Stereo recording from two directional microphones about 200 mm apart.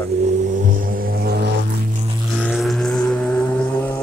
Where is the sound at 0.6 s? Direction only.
40° right (ahead or behind).